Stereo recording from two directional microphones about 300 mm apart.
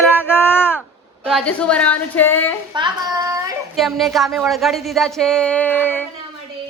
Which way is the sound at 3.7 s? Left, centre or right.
Centre.